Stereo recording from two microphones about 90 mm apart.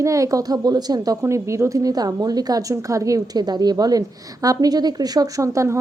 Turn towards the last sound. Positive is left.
turn(degrees=-35)  # may be behind; listen again after turning